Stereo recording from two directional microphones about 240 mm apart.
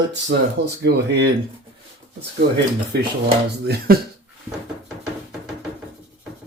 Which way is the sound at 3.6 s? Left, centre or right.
Right.